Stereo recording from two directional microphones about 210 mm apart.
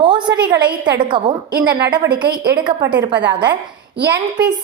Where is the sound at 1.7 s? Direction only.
55° right (ahead or behind).